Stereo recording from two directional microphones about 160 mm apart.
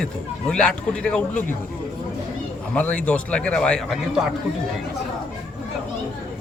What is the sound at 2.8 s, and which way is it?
A man's voice, 10° left (ahead or behind).